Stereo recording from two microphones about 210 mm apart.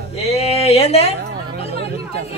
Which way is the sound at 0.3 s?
30° left (ahead or behind).